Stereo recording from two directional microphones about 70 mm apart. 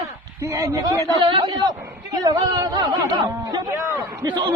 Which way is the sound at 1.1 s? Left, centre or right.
Right.